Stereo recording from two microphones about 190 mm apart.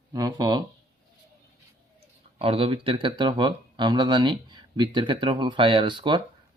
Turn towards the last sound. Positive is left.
turn(degrees=-25)  # may be behind; listen again after turning